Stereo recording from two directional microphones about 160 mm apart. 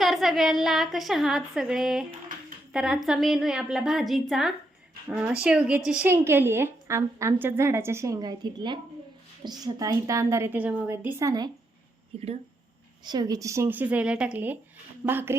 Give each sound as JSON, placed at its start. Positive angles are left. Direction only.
{"t": 0.0, "sound": "a woman's voice", "side_deg": 0}
{"t": 12.1, "sound": "speech", "side_deg": -40}
{"t": 13.1, "sound": "speech", "side_deg": -25}